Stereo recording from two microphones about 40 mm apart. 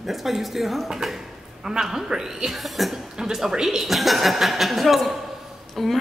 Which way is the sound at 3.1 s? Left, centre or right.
Centre.